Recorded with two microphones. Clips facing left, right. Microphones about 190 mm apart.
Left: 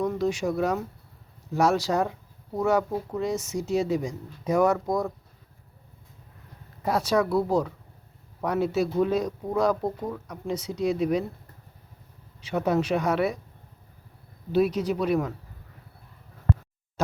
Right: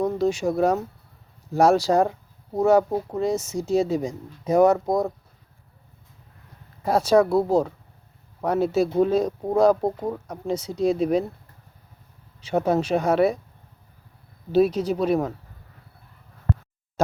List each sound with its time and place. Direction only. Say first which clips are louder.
0.0 s speech: right 3 dB; 30° right (ahead or behind)
6.9 s speech: right 6 dB; 30° right (ahead or behind)
12.6 s speech: right 2 dB; 30° right (ahead or behind)
14.5 s speech: right 4 dB; 30° right (ahead or behind)